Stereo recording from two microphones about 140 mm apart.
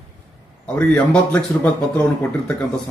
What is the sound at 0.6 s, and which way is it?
Speech, 10° left (ahead or behind).